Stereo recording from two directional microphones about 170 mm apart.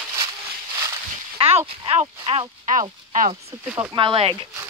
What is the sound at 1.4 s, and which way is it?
Speech, 35° right (ahead or behind).